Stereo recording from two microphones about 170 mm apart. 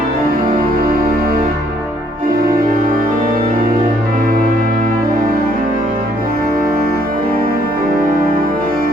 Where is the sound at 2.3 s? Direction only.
55° right (ahead or behind).